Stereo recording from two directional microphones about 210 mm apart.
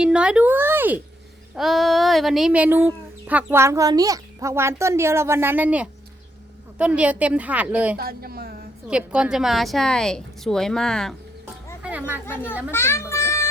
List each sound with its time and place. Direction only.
0.0 s a child's voice: 5° right (ahead or behind)
7.9 s speech: 45° right (ahead or behind)
8.9 s a woman's voice: 5° right (ahead or behind)
12.2 s a child's voice: 10° left (ahead or behind)
12.7 s music: 10° left (ahead or behind)